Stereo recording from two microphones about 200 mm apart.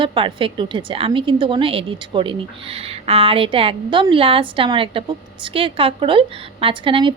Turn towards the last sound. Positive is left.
turn(degrees=-25)  # may be behind; listen again after turning